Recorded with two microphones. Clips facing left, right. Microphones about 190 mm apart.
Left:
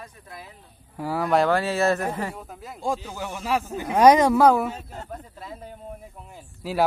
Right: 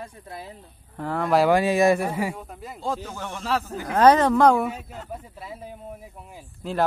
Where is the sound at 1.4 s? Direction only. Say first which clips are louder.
Right 3 dB; 15° right (ahead or behind).